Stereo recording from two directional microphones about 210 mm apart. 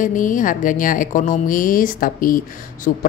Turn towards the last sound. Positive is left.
turn(degrees=40)  # may be behind; listen again after turning